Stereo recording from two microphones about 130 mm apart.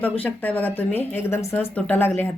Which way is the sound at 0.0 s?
15° left (ahead or behind).